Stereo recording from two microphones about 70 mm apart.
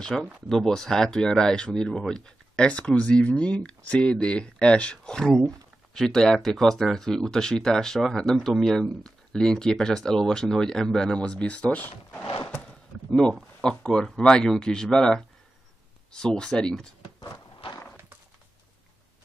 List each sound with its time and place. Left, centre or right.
0.0 s speech: centre; by 12.6 s left
13.6 s speech: centre
17.2 s a sound: left